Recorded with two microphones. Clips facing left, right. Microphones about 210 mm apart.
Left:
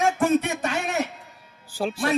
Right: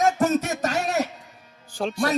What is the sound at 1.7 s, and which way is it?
Speech, 5° left (ahead or behind).